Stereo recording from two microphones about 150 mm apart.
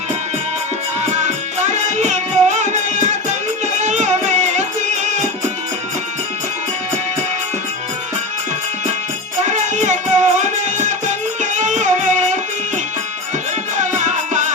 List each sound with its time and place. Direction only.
1.1 s music: 50° right (ahead or behind)
9.4 s music: 50° right (ahead or behind)
13.7 s music: 55° right (ahead or behind)